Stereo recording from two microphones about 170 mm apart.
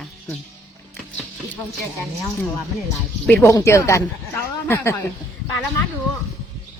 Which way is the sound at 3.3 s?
10° left (ahead or behind).